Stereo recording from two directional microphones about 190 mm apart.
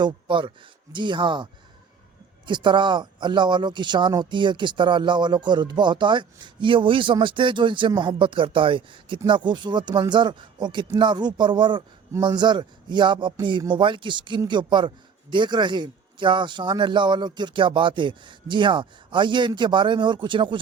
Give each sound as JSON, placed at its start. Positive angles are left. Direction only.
{"t": 0.0, "sound": "speech", "side_deg": -25}
{"t": 2.5, "sound": "speech", "side_deg": -25}